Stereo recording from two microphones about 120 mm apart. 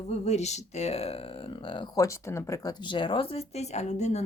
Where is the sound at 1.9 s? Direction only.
25° left (ahead or behind); by 4.2 s 75° left (ahead or behind).